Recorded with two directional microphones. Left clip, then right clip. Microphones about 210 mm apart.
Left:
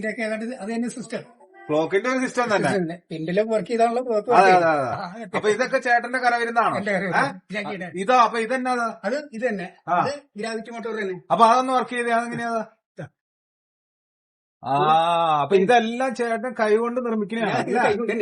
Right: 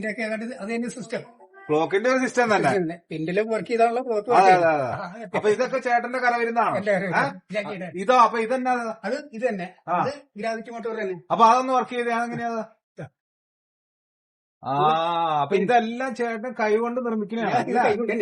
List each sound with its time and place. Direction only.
0.0 s a man's voice: centre (ahead or behind)
1.7 s a man's voice: 10° right (ahead or behind)
4.9 s a man's voice: 10° left (ahead or behind)
8.1 s a man's voice: 5° left (ahead or behind)
14.6 s a man's voice: 15° left (ahead or behind)